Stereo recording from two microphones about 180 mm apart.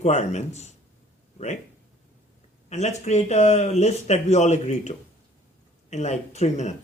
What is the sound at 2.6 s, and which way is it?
Speech, 40° left (ahead or behind).